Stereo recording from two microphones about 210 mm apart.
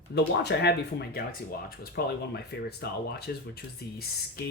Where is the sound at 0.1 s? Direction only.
55° left (ahead or behind).